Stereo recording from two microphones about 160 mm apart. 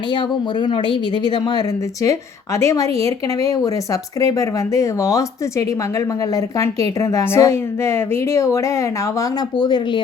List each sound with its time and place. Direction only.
0.6 s a woman's voice: 30° left (ahead or behind)